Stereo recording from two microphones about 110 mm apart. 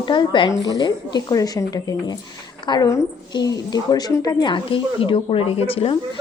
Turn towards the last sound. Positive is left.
turn(degrees=60)  # may be behind; listen again after turning